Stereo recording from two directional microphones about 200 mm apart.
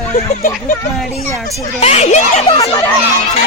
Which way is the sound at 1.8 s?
35° left (ahead or behind).